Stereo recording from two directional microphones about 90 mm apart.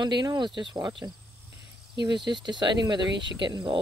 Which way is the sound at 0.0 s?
55° right (ahead or behind).